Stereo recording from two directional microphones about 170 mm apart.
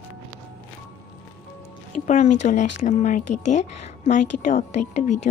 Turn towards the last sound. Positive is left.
turn(degrees=45)  # may be behind; listen again after turning